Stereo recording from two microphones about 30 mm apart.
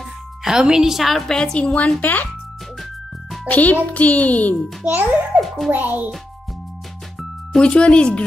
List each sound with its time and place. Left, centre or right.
0.4 s a woman's voice: centre
0.9 s a woman's voice: centre
1.3 s a woman's voice: left
1.6 s speech: left
2.0 s speech: left
3.4 s a child's voice: left
4.8 s a child's voice: right
7.6 s speech: left